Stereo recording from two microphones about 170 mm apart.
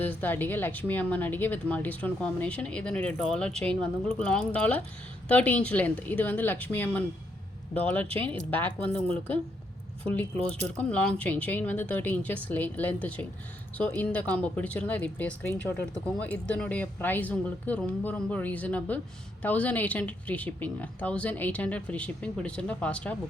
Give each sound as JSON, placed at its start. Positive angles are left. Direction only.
{"t": 0.0, "sound": "speech", "side_deg": 10}
{"t": 8.0, "sound": "speech", "side_deg": -35}
{"t": 8.3, "sound": "speech", "side_deg": 10}